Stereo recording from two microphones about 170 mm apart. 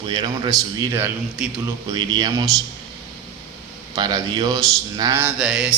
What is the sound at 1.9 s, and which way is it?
Speech, 25° right (ahead or behind).